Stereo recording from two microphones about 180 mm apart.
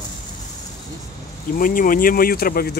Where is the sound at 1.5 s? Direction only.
50° left (ahead or behind).